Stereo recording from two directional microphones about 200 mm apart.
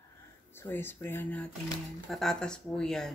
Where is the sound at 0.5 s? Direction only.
10° left (ahead or behind).